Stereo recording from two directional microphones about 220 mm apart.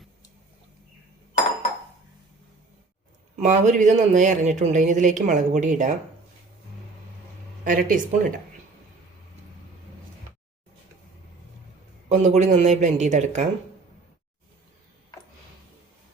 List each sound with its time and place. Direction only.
3.3 s speech: 35° right (ahead or behind)
7.6 s speech: 35° right (ahead or behind)
12.0 s speech: 30° right (ahead or behind)